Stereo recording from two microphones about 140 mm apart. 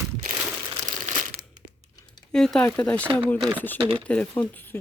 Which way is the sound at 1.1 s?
55° right (ahead or behind).